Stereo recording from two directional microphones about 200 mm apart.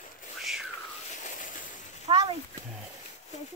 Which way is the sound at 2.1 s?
20° right (ahead or behind).